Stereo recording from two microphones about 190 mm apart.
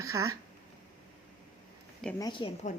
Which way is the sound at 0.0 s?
15° right (ahead or behind).